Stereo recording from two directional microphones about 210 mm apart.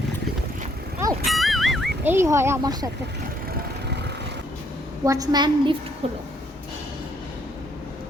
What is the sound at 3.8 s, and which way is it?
Lawn mower, 55° right (ahead or behind).